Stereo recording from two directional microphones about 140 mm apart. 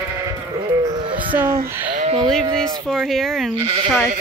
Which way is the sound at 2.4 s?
35° right (ahead or behind).